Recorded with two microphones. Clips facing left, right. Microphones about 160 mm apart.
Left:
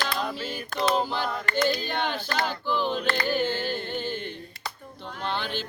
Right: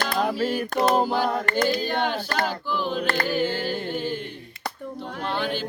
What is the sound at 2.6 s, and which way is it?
Choir, 5° right (ahead or behind).